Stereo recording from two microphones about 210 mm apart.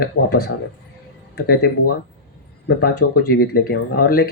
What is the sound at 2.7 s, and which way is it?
Speech, 50° left (ahead or behind).